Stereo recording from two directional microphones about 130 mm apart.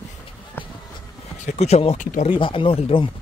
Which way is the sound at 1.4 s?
55° left (ahead or behind).